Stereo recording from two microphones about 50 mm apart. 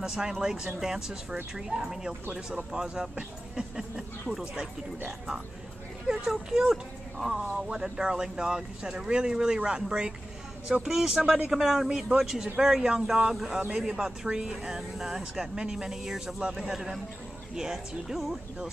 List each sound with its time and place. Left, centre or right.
0.0 s speech: centre